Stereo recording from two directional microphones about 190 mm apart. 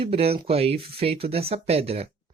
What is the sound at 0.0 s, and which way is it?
Speech, 30° right (ahead or behind).